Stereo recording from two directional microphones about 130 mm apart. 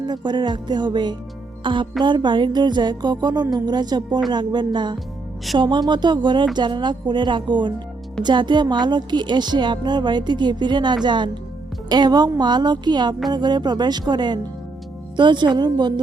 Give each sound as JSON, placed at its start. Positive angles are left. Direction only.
{"t": 0.0, "sound": "speech", "side_deg": -35}